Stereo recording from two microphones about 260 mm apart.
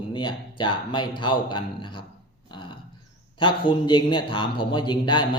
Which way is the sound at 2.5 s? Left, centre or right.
Centre.